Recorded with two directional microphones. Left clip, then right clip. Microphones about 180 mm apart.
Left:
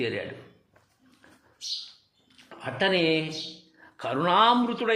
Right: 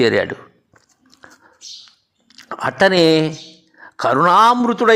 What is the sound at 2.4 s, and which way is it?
Speech, 45° right (ahead or behind).